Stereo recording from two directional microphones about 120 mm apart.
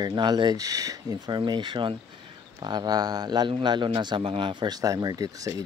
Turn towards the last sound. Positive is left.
turn(degrees=-30)  # may be behind; listen again after turning